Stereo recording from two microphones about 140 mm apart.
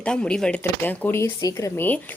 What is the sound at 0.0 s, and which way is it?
Speech, 5° left (ahead or behind).